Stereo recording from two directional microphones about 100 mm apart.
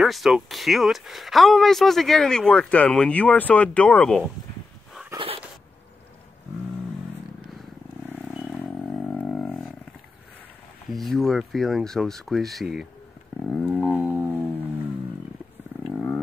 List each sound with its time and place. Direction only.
0.0 s speech: centre (ahead or behind)
8.5 s vehicle: 15° left (ahead or behind)
10.9 s speech: centre (ahead or behind)
13.4 s a sound: centre (ahead or behind)
13.8 s music: 15° right (ahead or behind)
15.9 s wild animals: centre (ahead or behind)